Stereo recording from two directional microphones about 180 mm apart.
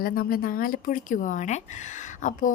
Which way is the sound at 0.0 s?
55° left (ahead or behind).